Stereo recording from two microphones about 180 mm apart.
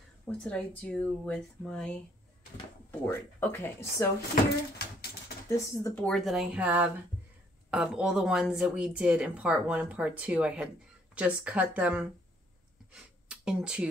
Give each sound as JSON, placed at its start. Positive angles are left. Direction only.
{"t": 0.3, "sound": "speech", "side_deg": 5}
{"t": 5.5, "sound": "speech", "side_deg": 15}
{"t": 6.0, "sound": "speech", "side_deg": 0}
{"t": 12.9, "sound": "a sound", "side_deg": -5}